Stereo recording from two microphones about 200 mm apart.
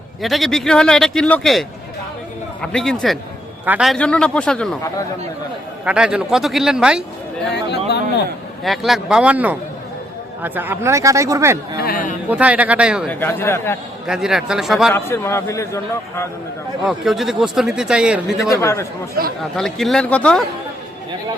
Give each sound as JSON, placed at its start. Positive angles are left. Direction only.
{"t": 0.2, "sound": "a man's voice", "side_deg": 0}
{"t": 5.8, "sound": "a man's voice", "side_deg": -5}
{"t": 7.4, "sound": "speech", "side_deg": 55}
{"t": 8.6, "sound": "a man's voice", "side_deg": 0}
{"t": 11.8, "sound": "a man's voice", "side_deg": 45}
{"t": 12.3, "sound": "speech", "side_deg": -5}
{"t": 13.1, "sound": "a man's voice", "side_deg": 10}
{"t": 14.1, "sound": "a man's voice", "side_deg": 0}
{"t": 14.9, "sound": "a man's voice", "side_deg": 15}
{"t": 16.8, "sound": "a man's voice", "side_deg": 0}
{"t": 18.4, "sound": "a man's voice", "side_deg": 15}
{"t": 19.4, "sound": "a man's voice", "side_deg": 0}